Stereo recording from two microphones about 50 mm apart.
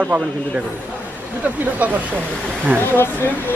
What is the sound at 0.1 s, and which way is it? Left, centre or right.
Speech, right.